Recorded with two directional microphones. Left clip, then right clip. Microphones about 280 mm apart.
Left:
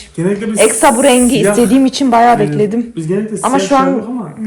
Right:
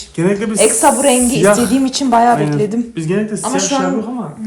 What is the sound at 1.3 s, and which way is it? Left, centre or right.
Speech, right.